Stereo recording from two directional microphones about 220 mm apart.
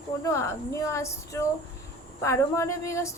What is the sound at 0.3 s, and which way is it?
A woman's voice, 15° left (ahead or behind).